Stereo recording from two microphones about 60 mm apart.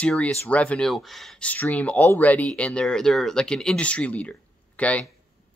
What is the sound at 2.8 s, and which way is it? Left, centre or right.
Speech, centre.